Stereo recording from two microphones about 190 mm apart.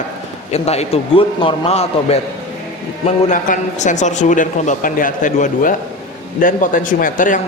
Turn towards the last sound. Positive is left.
turn(degrees=45)  # may be behind; listen again after turning